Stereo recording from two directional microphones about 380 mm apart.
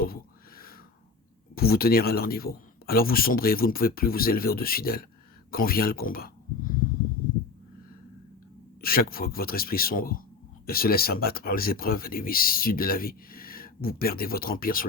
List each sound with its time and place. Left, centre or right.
0.0 s a sound: left
1.5 s speech: left
8.8 s speech: left